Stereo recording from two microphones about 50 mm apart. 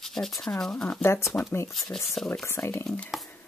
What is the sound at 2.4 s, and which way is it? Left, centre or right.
Speech, left.